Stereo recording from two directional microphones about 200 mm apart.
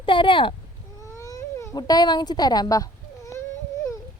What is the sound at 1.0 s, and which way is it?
Baby cry, 15° left (ahead or behind).